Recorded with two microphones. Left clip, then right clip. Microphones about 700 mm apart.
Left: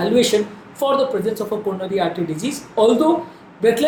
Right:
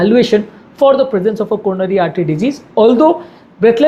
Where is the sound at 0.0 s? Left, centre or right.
Right.